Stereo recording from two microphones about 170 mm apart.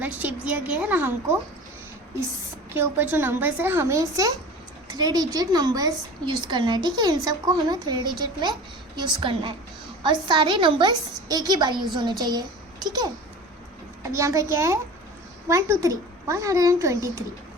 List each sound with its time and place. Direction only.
0.0 s a woman's voice: 10° right (ahead or behind)
2.7 s a woman's voice: 10° right (ahead or behind)
14.2 s a woman's voice: 15° right (ahead or behind)